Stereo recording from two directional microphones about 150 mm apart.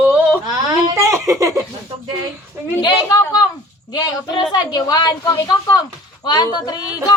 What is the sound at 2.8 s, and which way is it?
A man's voice, 25° left (ahead or behind).